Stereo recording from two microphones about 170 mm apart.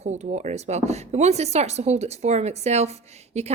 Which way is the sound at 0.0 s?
40° right (ahead or behind).